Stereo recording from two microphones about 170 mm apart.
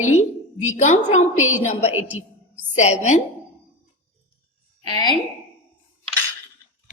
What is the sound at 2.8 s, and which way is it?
Speech, 45° left (ahead or behind).